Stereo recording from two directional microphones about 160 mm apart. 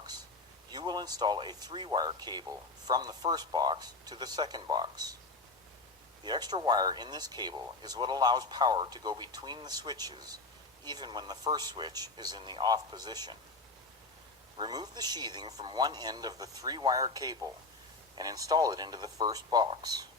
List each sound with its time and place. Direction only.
0.7 s speech: 25° right (ahead or behind)
6.2 s speech: 25° right (ahead or behind)
14.6 s speech: 25° right (ahead or behind)